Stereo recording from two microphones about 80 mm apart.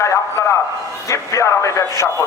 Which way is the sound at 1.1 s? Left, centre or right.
Left.